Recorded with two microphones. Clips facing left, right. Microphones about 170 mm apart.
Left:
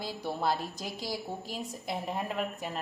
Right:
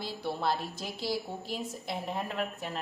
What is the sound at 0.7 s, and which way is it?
Speech, 40° left (ahead or behind).